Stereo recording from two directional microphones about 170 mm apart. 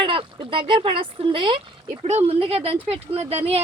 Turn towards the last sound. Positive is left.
turn(degrees=-35)  # may be behind; listen again after turning